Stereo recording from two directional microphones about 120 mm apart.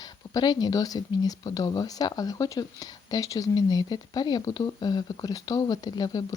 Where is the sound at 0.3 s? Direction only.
35° left (ahead or behind).